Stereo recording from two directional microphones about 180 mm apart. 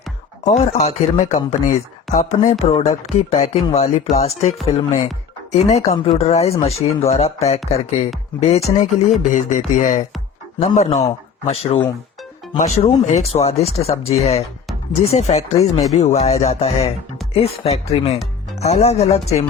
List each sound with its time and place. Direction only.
0.5 s speech: 35° left (ahead or behind)
9.3 s a sound: 45° left (ahead or behind)
10.6 s speech: 40° left (ahead or behind)